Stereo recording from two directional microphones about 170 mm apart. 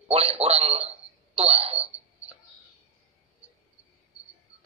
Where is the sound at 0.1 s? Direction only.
35° right (ahead or behind).